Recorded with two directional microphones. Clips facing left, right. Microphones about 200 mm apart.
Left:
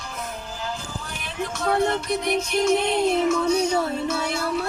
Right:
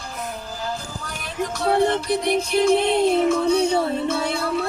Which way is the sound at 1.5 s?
35° right (ahead or behind).